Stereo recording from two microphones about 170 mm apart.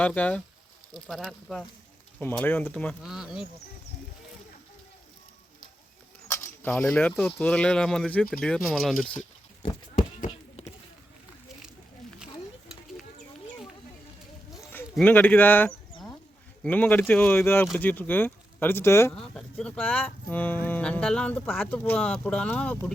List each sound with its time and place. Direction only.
0.0 s speech: 10° left (ahead or behind)
2.7 s speech: centre (ahead or behind)
6.2 s speech: 15° left (ahead or behind)
10.6 s rowboat: 40° left (ahead or behind)
14.9 s speech: 10° left (ahead or behind)
19.1 s speech: 5° left (ahead or behind)